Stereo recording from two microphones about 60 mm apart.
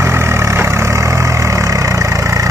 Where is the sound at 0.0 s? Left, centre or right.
Right.